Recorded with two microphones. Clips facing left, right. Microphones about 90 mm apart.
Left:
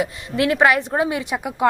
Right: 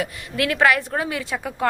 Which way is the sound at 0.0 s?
25° left (ahead or behind).